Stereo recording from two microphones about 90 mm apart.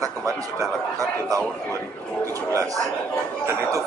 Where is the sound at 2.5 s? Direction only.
35° right (ahead or behind).